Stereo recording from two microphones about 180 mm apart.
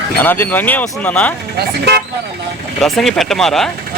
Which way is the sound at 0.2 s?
10° left (ahead or behind).